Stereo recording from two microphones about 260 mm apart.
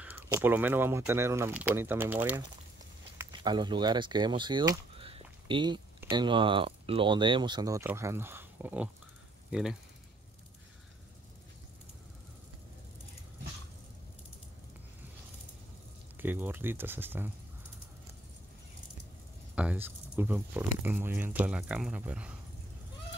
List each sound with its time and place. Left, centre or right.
0.0 s speech: centre
16.2 s speech: centre
19.5 s speech: centre